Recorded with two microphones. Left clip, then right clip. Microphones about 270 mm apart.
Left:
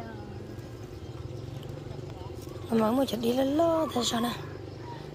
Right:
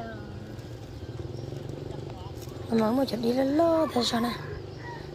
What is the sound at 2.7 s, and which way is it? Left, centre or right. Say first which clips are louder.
Speech: even; centre.